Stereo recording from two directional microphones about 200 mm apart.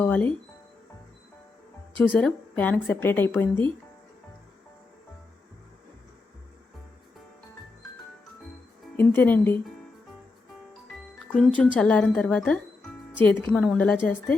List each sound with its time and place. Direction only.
0.0 s a woman's voice: 5° left (ahead or behind)
2.0 s a woman's voice: 5° left (ahead or behind)
9.0 s a woman's voice: 10° left (ahead or behind)
11.3 s a woman's voice: 5° left (ahead or behind)